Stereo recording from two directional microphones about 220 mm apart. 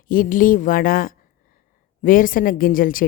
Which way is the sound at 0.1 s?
40° left (ahead or behind).